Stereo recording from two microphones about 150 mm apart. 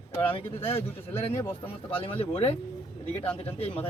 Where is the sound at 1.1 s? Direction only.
15° left (ahead or behind).